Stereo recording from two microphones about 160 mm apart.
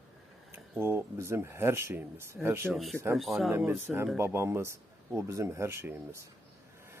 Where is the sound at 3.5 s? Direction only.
10° right (ahead or behind).